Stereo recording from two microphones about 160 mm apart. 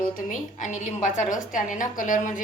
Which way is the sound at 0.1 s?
50° left (ahead or behind).